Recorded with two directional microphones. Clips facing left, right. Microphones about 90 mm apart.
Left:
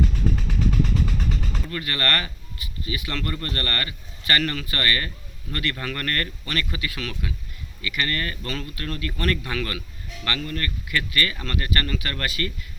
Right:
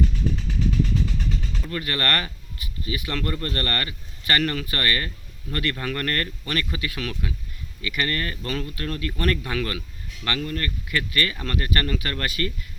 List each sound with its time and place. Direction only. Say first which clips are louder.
0.3 s vehicle: even; 60° left (ahead or behind)
1.7 s speech: right 1 dB; 25° right (ahead or behind)
7.1 s speech: right 1 dB; 20° right (ahead or behind)